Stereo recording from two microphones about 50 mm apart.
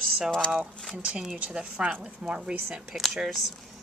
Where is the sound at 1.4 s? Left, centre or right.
Right.